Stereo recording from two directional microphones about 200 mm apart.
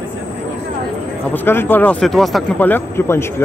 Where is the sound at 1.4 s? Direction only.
10° left (ahead or behind).